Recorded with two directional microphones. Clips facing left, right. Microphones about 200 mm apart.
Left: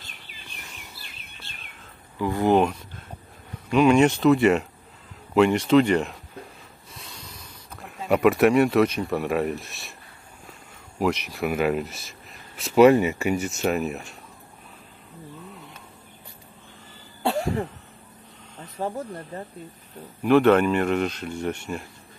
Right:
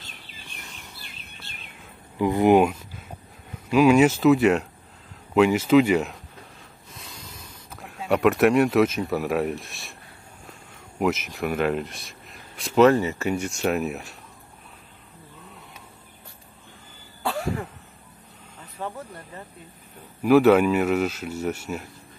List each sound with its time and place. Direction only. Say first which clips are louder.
2.1 s a sound: right 3 dB; 20° right (ahead or behind)
3.7 s speech: right 1 dB; 5° right (ahead or behind)
6.9 s a sound: right 1 dB; centre (ahead or behind)
11.0 s speech: even; centre (ahead or behind)
17.2 s cough: left 3 dB; 25° left (ahead or behind)
18.6 s speech: left 5 dB; 35° left (ahead or behind)
20.2 s speech: right 1 dB; 5° right (ahead or behind)